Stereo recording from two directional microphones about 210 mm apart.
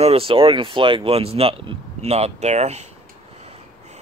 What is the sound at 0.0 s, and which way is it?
Speech, 25° right (ahead or behind).